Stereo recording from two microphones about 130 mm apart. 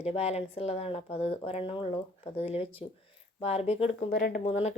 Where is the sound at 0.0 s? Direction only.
50° left (ahead or behind).